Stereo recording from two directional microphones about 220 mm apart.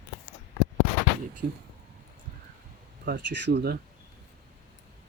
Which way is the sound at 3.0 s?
45° right (ahead or behind).